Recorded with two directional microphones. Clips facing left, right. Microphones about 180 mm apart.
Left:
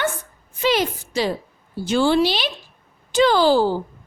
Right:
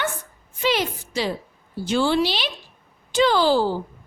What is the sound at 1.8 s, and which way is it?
A woman's voice, 45° left (ahead or behind).